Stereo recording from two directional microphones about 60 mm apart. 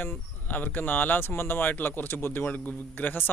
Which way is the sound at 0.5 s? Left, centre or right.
Left.